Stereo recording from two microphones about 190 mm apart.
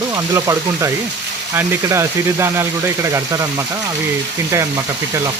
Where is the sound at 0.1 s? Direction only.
15° right (ahead or behind).